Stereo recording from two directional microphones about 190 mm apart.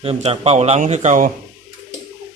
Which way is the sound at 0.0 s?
30° right (ahead or behind).